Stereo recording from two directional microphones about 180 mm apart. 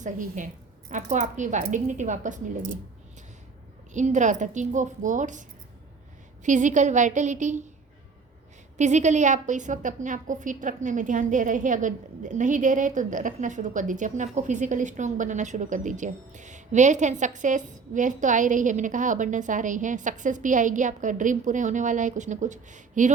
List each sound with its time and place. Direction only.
0.0 s a woman's voice: 45° right (ahead or behind)
3.9 s a woman's voice: 40° right (ahead or behind)
8.8 s a woman's voice: 40° right (ahead or behind)